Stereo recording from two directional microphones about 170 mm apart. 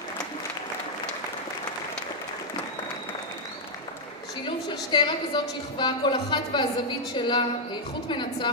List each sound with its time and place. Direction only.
4.5 s a woman's voice: 25° left (ahead or behind)